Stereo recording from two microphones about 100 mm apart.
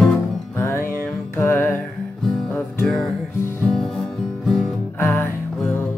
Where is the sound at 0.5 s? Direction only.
20° left (ahead or behind).